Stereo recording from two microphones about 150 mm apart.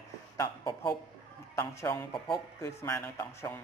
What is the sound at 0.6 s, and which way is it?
Speech, 35° left (ahead or behind).